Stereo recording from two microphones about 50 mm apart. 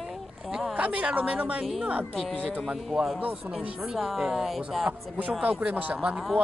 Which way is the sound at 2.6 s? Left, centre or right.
Centre.